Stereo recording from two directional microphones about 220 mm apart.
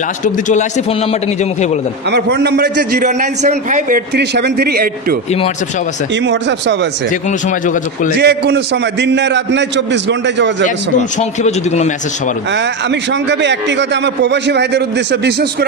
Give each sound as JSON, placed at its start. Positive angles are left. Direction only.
{"t": 0.2, "sound": "a man's voice", "side_deg": 35}
{"t": 2.0, "sound": "a man's voice", "side_deg": -50}
{"t": 4.1, "sound": "a man's voice", "side_deg": -50}
{"t": 6.2, "sound": "a man's voice", "side_deg": -50}
{"t": 7.4, "sound": "a man's voice", "side_deg": 35}
{"t": 8.2, "sound": "a man's voice", "side_deg": -50}
{"t": 11.0, "sound": "a man's voice", "side_deg": 30}
{"t": 13.3, "sound": "a man's voice", "side_deg": -55}